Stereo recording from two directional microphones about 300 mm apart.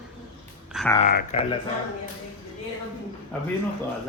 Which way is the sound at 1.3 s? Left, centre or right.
Centre.